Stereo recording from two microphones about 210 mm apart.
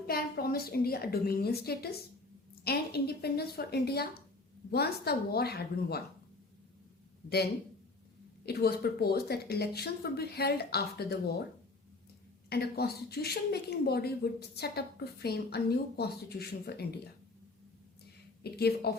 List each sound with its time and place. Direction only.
0.1 s a woman's voice: 45° left (ahead or behind)
7.3 s a woman's voice: 50° left (ahead or behind)
12.5 s a woman's voice: 50° left (ahead or behind)
18.4 s a woman's voice: 50° left (ahead or behind)